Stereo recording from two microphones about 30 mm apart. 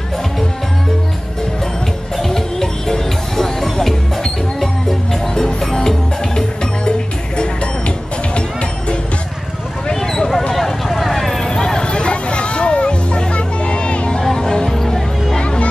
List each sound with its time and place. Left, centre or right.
2.1 s music: centre
9.9 s a sound: centre
11.4 s a sound: centre
11.8 s music: left
14.2 s music: centre
14.7 s music: centre